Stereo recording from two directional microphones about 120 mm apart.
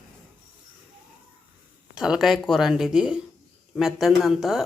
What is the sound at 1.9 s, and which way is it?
Speech, 5° right (ahead or behind).